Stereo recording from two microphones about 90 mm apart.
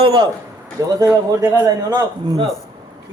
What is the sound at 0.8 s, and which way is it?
A man's voice, 40° right (ahead or behind).